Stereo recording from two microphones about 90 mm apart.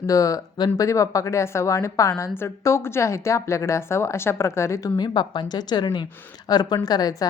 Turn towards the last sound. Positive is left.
turn(degrees=45)  # may be behind; listen again after turning